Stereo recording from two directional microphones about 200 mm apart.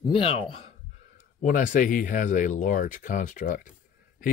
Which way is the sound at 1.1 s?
40° left (ahead or behind).